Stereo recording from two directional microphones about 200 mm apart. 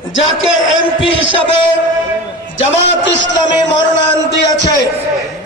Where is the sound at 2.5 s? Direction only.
65° left (ahead or behind).